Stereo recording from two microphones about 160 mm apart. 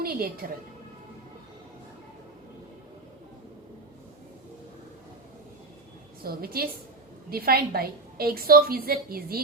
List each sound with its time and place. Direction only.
0.0 s a woman's voice: 70° right (ahead or behind)
6.2 s a woman's voice: 70° right (ahead or behind)